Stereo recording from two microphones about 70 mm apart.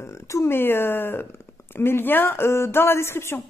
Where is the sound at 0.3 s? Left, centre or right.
Left.